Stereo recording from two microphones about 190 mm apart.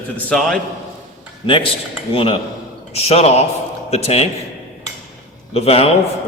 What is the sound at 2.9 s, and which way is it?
A man's voice, 35° left (ahead or behind).